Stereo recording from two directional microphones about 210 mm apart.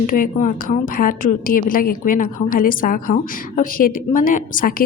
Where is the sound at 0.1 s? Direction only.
40° left (ahead or behind).